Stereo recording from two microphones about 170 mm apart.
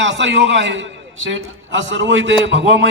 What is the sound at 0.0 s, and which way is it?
A man's voice, 90° right.